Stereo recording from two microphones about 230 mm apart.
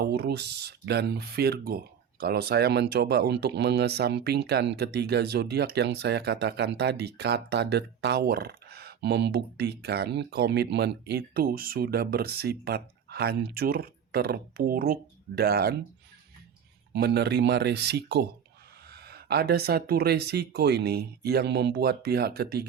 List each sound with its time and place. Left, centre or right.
0.0 s speech: right
16.9 s speech: right